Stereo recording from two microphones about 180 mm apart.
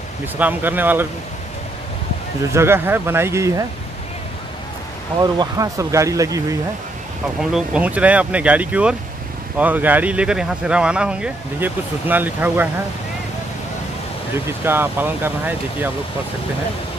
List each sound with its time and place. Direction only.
0.4 s speech: 10° right (ahead or behind)
2.5 s speech: 15° right (ahead or behind)
5.2 s speech: 20° right (ahead or behind)
7.3 s speech: 5° right (ahead or behind)
14.3 s speech: 10° right (ahead or behind)